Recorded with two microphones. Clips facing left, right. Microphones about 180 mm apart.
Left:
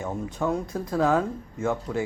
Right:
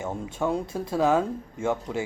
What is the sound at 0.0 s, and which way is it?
Speech, 25° right (ahead or behind).